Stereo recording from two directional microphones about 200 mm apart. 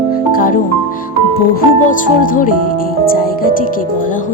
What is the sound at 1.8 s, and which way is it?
Music, 40° left (ahead or behind).